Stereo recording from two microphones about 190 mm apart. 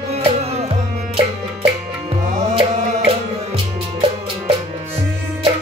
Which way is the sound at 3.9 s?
30° right (ahead or behind).